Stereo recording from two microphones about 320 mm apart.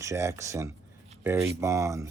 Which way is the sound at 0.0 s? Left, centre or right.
Centre.